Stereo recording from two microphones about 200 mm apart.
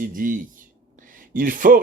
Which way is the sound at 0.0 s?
45° right (ahead or behind).